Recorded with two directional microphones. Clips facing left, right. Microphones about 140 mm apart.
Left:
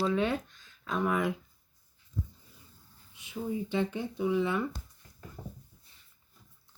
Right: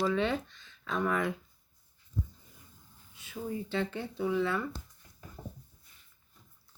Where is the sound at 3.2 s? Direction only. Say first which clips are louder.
Left 3 dB; 15° left (ahead or behind).